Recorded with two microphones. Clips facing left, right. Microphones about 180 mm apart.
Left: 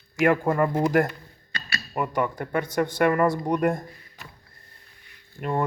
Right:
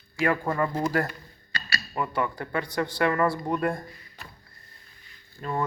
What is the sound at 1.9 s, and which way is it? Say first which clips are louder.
Speech: left 3 dB; 10° left (ahead or behind).